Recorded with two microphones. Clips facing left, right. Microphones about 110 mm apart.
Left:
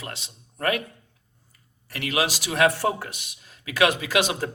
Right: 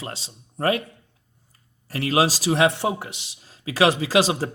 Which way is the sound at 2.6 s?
25° right (ahead or behind).